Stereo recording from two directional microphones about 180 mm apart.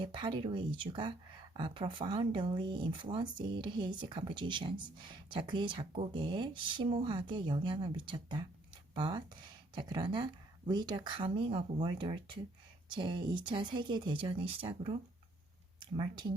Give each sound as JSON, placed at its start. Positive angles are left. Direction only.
{"t": 0.0, "sound": "speech", "side_deg": -30}